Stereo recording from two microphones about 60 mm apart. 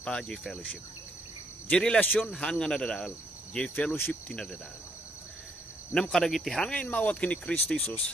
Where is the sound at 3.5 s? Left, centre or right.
Centre.